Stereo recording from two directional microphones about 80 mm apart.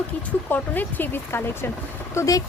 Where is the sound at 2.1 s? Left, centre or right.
Left.